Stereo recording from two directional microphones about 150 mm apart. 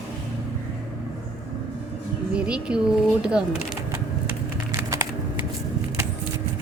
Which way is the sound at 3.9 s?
20° right (ahead or behind).